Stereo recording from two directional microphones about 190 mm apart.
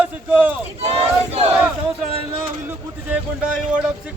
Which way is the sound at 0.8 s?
35° right (ahead or behind).